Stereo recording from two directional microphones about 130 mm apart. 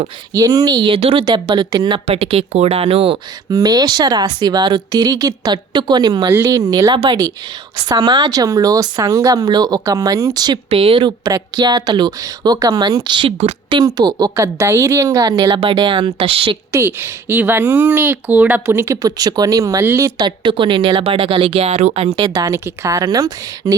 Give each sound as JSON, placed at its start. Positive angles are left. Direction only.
{"t": 0.3, "sound": "speech", "side_deg": -30}
{"t": 1.2, "sound": "speech", "side_deg": -35}
{"t": 2.0, "sound": "speech", "side_deg": -50}
{"t": 3.5, "sound": "speech", "side_deg": -30}
{"t": 10.7, "sound": "speech", "side_deg": -45}
{"t": 16.7, "sound": "speech", "side_deg": -20}
{"t": 19.8, "sound": "speech", "side_deg": -15}
{"t": 20.1, "sound": "speech", "side_deg": -30}
{"t": 22.2, "sound": "speech", "side_deg": -25}